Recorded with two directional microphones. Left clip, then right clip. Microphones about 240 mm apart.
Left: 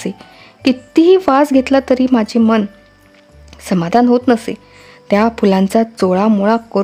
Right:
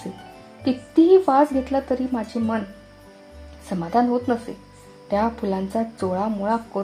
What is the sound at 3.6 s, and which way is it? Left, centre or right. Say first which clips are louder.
Speech: left 9 dB; left.